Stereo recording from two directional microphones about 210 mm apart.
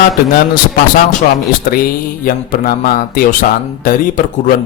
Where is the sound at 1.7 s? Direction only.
40° left (ahead or behind).